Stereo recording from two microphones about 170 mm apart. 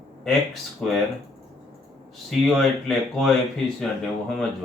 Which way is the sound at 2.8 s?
Centre (ahead or behind).